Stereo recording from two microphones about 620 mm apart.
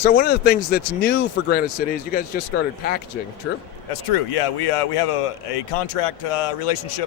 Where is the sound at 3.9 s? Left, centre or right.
Left.